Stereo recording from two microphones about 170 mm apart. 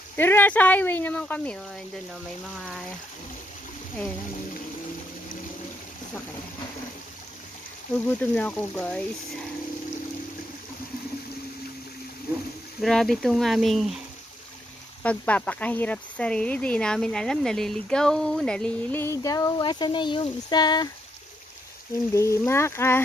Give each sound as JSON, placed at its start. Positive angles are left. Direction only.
{"t": 0.1, "sound": "speech", "side_deg": 10}
{"t": 8.2, "sound": "speech", "side_deg": 10}
{"t": 12.8, "sound": "speech", "side_deg": 0}
{"t": 15.0, "sound": "speech", "side_deg": 10}
{"t": 22.1, "sound": "speech", "side_deg": 15}